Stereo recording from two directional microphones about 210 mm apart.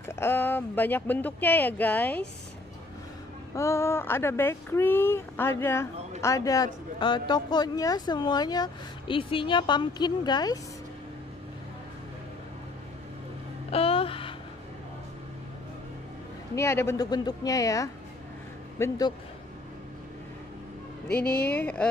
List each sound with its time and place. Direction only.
0.0 s speech: 10° left (ahead or behind)
3.5 s a woman's voice: 15° left (ahead or behind)
13.7 s music: 25° left (ahead or behind)
16.5 s speech: 15° left (ahead or behind)
21.1 s speech: 45° left (ahead or behind)
21.5 s speech: 5° left (ahead or behind)